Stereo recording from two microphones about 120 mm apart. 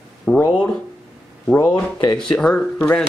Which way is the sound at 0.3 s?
5° left (ahead or behind).